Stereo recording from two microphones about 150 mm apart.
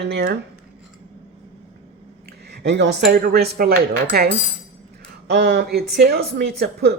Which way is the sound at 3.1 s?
90° right.